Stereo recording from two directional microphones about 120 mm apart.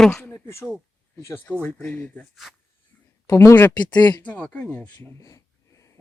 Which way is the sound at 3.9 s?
35° left (ahead or behind).